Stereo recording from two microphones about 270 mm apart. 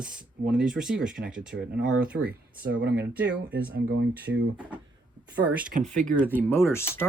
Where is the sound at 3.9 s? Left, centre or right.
Right.